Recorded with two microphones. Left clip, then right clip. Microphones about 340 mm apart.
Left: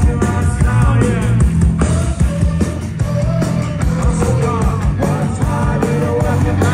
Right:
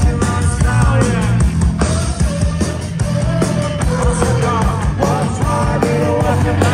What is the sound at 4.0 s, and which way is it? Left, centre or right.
Music, right.